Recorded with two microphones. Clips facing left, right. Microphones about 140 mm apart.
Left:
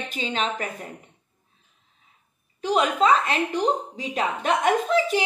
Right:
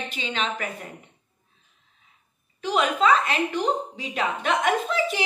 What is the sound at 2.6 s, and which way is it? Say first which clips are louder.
A woman's voice: left 1 dB; 35° left (ahead or behind).